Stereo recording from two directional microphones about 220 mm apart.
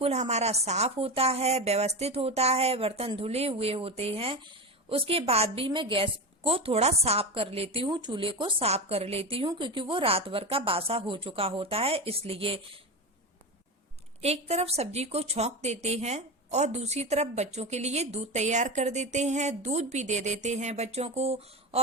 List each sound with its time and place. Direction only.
0.0 s a woman's voice: 30° right (ahead or behind)
14.2 s a woman's voice: 30° right (ahead or behind)